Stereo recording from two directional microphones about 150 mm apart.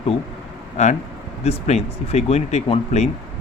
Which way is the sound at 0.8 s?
50° left (ahead or behind).